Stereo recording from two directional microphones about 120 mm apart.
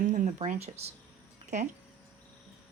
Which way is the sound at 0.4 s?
75° right (ahead or behind).